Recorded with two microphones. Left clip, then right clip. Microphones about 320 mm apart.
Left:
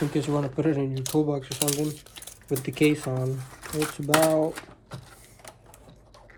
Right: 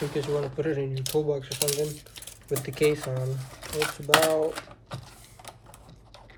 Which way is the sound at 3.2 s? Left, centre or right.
Centre.